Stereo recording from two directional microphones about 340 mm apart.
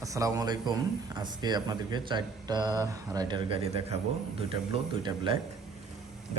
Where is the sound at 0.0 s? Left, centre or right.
Centre.